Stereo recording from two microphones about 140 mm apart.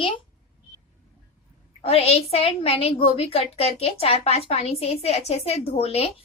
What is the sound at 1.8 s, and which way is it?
A woman's voice, 45° left (ahead or behind).